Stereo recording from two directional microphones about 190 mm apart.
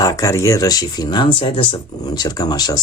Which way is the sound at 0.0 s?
15° left (ahead or behind).